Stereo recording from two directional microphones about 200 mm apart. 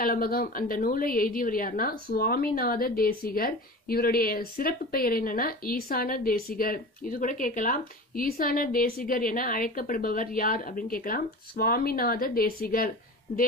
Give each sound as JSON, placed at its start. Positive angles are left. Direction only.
{"t": 0.0, "sound": "a woman's voice", "side_deg": 45}